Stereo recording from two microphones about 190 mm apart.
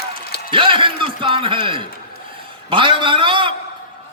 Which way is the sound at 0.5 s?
25° right (ahead or behind).